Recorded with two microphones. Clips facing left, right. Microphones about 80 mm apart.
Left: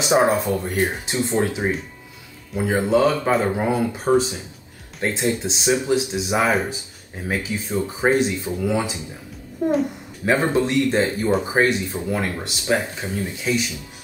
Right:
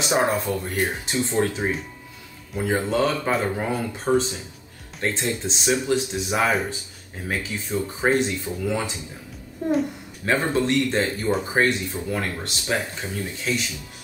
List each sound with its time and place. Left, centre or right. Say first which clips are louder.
0.0 s speech: left 4 dB; centre
9.7 s a child's voice: left 1 dB; centre
10.3 s speech: left 2 dB; centre